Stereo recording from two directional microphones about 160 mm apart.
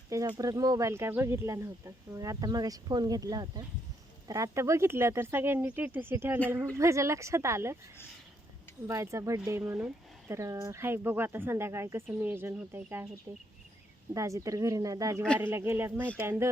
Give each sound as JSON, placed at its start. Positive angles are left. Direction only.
{"t": 0.1, "sound": "speech", "side_deg": -20}
{"t": 8.9, "sound": "speech", "side_deg": -20}
{"t": 14.1, "sound": "speech", "side_deg": -20}